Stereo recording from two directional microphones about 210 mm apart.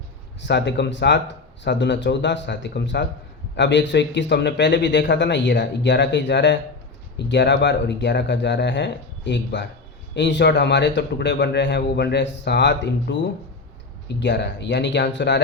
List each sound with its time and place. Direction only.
0.4 s a man's voice: 55° left (ahead or behind)